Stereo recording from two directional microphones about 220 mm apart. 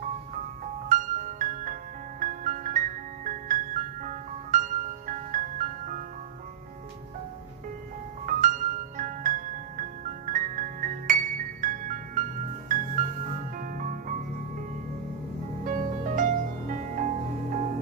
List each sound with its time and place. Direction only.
0.8 s music: 35° right (ahead or behind)
8.3 s music: 35° right (ahead or behind)
15.6 s music: 35° right (ahead or behind)